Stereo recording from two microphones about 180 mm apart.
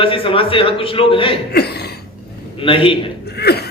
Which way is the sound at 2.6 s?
30° left (ahead or behind).